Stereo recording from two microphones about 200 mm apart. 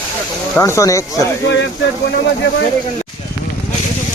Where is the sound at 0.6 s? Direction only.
15° left (ahead or behind).